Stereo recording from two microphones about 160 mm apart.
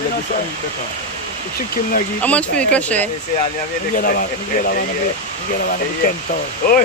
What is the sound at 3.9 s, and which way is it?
Speech, 60° left (ahead or behind).